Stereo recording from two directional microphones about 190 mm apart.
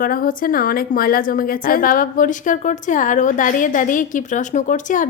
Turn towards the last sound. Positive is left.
turn(degrees=40)  # may be behind; listen again after turning